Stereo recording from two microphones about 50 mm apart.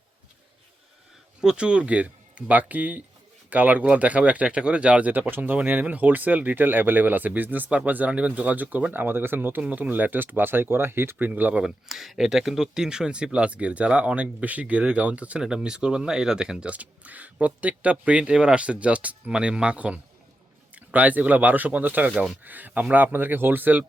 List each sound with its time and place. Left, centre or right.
1.4 s speech: centre
5.2 s speech: right
9.6 s speech: right
11.3 s speech: right
11.6 s speech: centre; by 15.4 s right
15.4 s speech: centre; by 22.1 s right
22.1 s speech: centre
22.4 s speech: right